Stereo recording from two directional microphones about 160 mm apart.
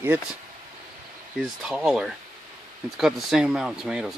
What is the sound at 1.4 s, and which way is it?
Speech, 5° right (ahead or behind).